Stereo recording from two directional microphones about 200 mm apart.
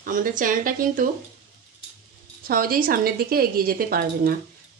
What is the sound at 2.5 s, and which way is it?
Speech, 45° right (ahead or behind).